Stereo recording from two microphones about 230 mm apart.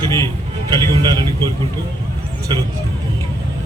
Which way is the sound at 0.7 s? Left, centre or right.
Centre.